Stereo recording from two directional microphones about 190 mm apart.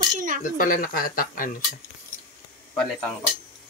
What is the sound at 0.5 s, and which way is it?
Speech, 45° left (ahead or behind).